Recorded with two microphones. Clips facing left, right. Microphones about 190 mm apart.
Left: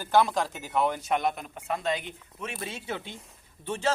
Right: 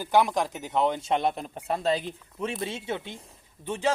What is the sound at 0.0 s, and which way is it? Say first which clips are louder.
Speech: right 1 dB; 15° right (ahead or behind).